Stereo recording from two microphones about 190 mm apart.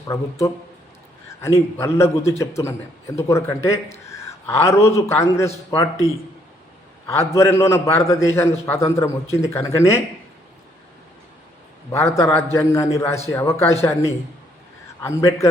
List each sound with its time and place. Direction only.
0.1 s a man's voice: 15° left (ahead or behind)
4.0 s a sound: 15° left (ahead or behind)
4.9 s a man's voice: 15° left (ahead or behind)
7.1 s a man's voice: 15° left (ahead or behind)
11.9 s a man's voice: 15° left (ahead or behind)
15.0 s a man's voice: 15° left (ahead or behind)